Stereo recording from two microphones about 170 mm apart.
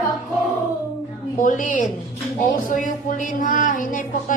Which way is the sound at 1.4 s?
50° left (ahead or behind).